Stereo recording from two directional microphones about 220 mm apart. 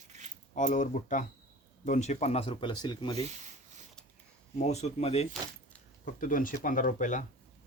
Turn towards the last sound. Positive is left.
turn(degrees=35)  # may be behind; listen again after turning